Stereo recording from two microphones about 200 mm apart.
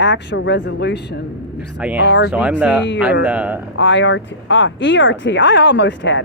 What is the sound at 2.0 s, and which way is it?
Speech, 65° left (ahead or behind).